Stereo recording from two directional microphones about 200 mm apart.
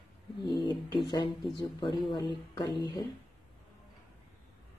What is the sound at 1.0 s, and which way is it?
Speech, 20° left (ahead or behind).